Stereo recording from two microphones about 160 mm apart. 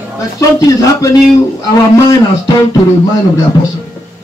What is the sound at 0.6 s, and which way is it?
Speech, 20° left (ahead or behind).